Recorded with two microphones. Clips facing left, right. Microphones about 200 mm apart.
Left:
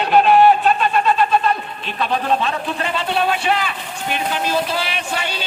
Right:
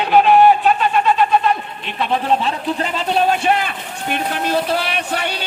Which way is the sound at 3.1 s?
40° right (ahead or behind).